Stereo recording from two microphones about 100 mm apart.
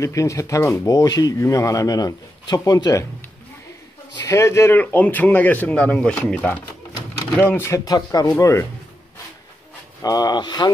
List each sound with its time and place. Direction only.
0.0 s speech: 30° left (ahead or behind)
4.2 s speech: 30° left (ahead or behind)
4.7 s speech: 15° left (ahead or behind)
7.8 s speech: 35° left (ahead or behind)
10.0 s speech: 40° left (ahead or behind)